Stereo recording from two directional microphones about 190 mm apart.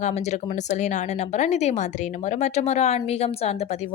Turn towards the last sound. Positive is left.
turn(degrees=35)  # may be behind; listen again after turning